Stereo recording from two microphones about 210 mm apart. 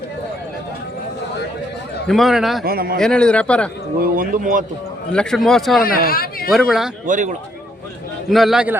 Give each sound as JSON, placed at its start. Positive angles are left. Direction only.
{"t": 2.0, "sound": "a man's voice", "side_deg": 0}
{"t": 2.6, "sound": "speech", "side_deg": -45}
{"t": 3.0, "sound": "a man's voice", "side_deg": 5}
{"t": 4.0, "sound": "speech", "side_deg": -45}
{"t": 5.1, "sound": "a man's voice", "side_deg": 5}
{"t": 5.8, "sound": "speech", "side_deg": 45}
{"t": 6.5, "sound": "a man's voice", "side_deg": 0}
{"t": 7.1, "sound": "speech", "side_deg": -35}
{"t": 8.3, "sound": "a man's voice", "side_deg": 0}